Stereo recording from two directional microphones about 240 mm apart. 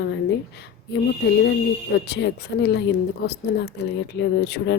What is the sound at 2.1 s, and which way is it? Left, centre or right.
Speech, left.